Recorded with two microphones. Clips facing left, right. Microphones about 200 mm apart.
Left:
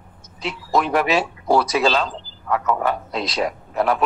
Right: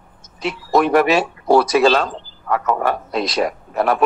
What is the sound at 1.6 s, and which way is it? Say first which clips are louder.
Speech: right 5 dB; 55° right (ahead or behind).